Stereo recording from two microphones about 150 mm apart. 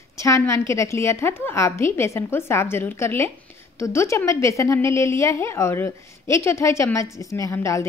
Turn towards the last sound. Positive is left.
turn(degrees=20)  # may be behind; listen again after turning